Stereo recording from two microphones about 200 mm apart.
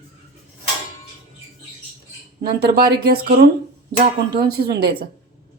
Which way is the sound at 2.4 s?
50° right (ahead or behind).